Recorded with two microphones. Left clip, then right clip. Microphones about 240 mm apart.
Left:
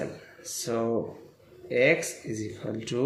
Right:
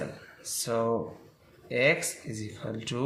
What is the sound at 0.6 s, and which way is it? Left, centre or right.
Speech, right.